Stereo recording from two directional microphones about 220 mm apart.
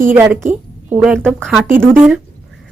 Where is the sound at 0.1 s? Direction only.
10° right (ahead or behind).